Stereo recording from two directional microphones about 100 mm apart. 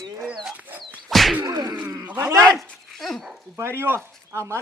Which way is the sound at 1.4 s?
45° right (ahead or behind).